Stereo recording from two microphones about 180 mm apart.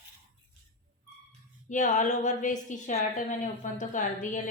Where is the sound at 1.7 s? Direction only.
45° left (ahead or behind).